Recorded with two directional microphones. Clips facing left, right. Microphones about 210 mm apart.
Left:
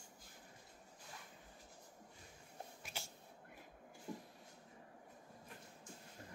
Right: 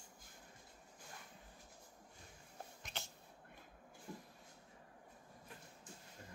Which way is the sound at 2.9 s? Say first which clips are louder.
Right 1 dB; 10° left (ahead or behind).